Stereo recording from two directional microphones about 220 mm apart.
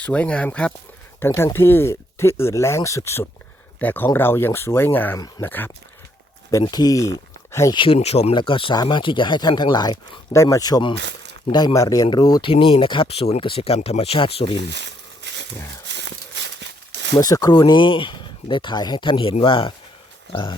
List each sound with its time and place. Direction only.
0.0 s speech: 5° left (ahead or behind); by 14.6 s 25° left (ahead or behind)
14.6 s crumpling: 50° right (ahead or behind)
15.9 s a sound: 50° right (ahead or behind)
17.2 s speech: 15° left (ahead or behind)